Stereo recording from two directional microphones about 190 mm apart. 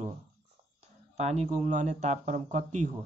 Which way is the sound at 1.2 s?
35° right (ahead or behind).